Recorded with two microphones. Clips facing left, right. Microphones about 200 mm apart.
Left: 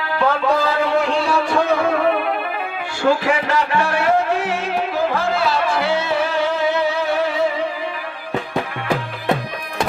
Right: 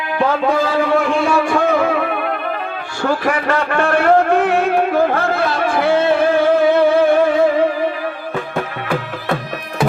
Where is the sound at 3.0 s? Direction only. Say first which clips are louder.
Even; 50° right (ahead or behind).